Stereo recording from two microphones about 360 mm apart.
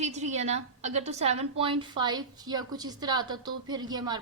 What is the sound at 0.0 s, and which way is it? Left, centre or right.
A woman's voice, centre.